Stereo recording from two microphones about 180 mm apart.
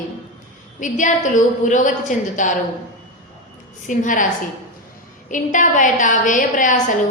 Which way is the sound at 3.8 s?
45° left (ahead or behind).